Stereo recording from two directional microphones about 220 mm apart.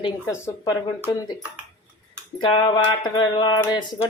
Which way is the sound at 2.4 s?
20° left (ahead or behind).